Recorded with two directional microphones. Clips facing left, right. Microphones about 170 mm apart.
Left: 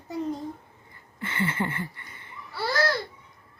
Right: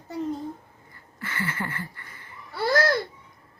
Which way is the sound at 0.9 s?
25° left (ahead or behind).